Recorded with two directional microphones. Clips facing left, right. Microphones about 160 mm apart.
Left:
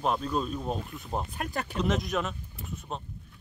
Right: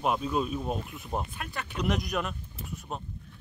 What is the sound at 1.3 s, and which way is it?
Speech, 40° left (ahead or behind).